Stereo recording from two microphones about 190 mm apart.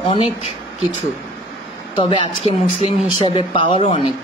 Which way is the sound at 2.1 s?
25° left (ahead or behind).